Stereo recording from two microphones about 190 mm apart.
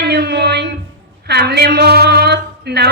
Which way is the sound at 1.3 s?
60° right (ahead or behind).